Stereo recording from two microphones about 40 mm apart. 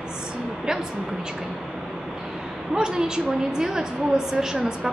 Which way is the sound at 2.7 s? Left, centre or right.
Centre.